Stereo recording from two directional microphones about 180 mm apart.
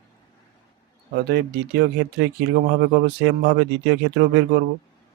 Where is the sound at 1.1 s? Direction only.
65° right (ahead or behind).